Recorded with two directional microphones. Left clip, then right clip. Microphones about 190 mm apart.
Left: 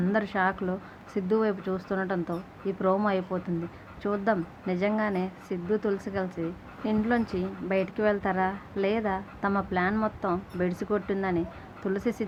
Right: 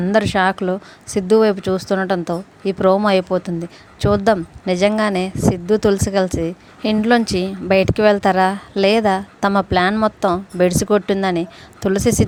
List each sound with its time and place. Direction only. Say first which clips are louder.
0.0 s speech: right 11 dB; 45° right (ahead or behind)